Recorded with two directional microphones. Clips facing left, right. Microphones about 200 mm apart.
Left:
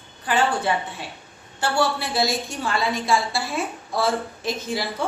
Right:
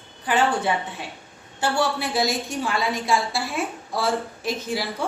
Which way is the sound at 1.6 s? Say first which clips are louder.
Even; 15° right (ahead or behind).